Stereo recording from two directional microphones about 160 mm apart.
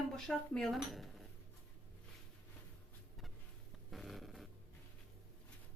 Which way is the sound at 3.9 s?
Centre (ahead or behind).